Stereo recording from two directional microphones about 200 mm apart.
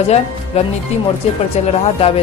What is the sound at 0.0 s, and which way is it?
Speech, 30° left (ahead or behind).